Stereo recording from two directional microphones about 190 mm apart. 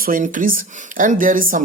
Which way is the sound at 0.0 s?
45° right (ahead or behind).